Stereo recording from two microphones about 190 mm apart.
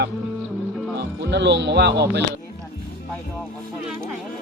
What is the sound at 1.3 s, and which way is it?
Speech, 65° right (ahead or behind).